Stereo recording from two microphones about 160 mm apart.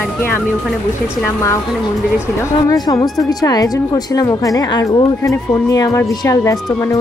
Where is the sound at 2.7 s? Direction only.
20° left (ahead or behind).